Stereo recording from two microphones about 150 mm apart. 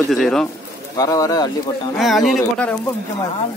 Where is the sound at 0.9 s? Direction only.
25° left (ahead or behind).